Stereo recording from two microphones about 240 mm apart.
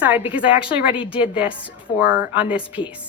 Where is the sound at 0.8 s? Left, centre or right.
Left.